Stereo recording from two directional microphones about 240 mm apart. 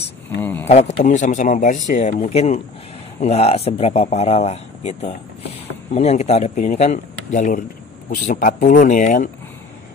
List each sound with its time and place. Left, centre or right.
0.4 s speech: centre
0.7 s speech: left